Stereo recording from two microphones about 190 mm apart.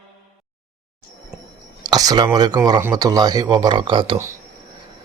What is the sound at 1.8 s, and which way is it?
Speech, 20° right (ahead or behind).